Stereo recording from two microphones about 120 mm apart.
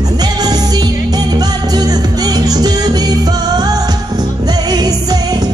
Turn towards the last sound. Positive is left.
turn(degrees=-35)  # may be behind; listen again after turning